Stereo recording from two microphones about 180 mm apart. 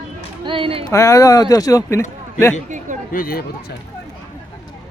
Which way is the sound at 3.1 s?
55° left (ahead or behind).